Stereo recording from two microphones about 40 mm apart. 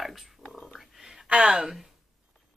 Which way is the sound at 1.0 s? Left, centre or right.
Centre.